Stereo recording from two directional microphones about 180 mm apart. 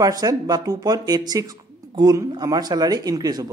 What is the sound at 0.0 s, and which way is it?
Speech, 20° right (ahead or behind).